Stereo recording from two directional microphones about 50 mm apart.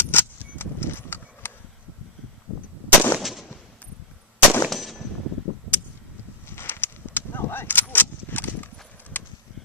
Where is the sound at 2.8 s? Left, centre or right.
Left.